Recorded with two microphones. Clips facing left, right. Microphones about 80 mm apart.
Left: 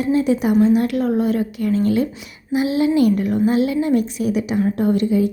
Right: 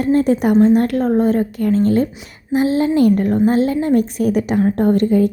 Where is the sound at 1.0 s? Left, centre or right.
Right.